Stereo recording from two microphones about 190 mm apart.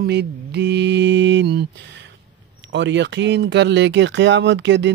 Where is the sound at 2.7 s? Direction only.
70° right (ahead or behind).